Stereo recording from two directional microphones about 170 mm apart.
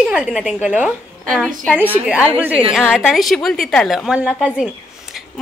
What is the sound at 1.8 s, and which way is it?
A child's voice, 10° right (ahead or behind).